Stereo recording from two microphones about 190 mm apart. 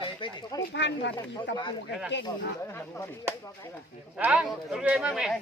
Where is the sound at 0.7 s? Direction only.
65° left (ahead or behind).